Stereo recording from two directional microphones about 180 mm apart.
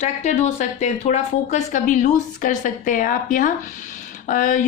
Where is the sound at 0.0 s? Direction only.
40° left (ahead or behind).